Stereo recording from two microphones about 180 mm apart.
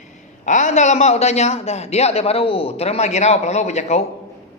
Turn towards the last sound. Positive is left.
turn(degrees=40)  # may be behind; listen again after turning